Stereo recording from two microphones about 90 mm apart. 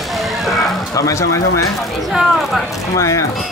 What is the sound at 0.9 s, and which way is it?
Speech, 35° left (ahead or behind).